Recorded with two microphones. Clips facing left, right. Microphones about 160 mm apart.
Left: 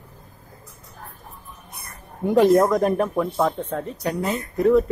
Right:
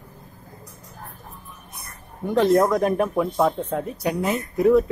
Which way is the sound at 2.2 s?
10° left (ahead or behind).